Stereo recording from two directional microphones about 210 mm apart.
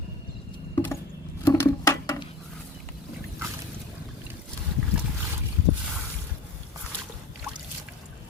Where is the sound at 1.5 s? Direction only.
15° left (ahead or behind).